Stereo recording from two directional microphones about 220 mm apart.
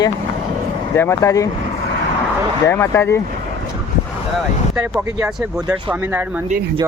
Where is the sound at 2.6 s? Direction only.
10° left (ahead or behind).